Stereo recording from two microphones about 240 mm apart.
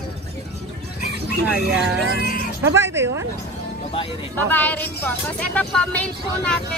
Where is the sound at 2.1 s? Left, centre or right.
Left.